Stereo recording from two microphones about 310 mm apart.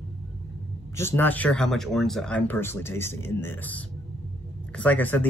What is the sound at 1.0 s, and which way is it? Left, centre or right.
Speech, centre.